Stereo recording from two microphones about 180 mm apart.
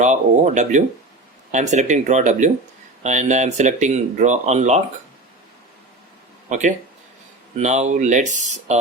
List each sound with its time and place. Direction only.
0.0 s speech: 40° right (ahead or behind)
6.5 s speech: 40° right (ahead or behind)